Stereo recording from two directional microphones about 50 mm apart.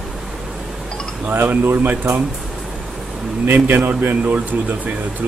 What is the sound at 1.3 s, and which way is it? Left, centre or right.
Speech, right.